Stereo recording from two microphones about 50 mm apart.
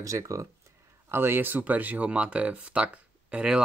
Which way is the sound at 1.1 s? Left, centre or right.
Right.